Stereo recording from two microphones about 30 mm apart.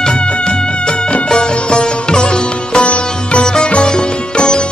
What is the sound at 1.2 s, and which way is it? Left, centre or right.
Sitar, left.